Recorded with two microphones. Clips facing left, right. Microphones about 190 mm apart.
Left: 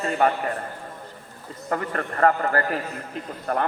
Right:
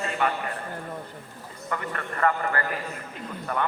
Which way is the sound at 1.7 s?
40° left (ahead or behind).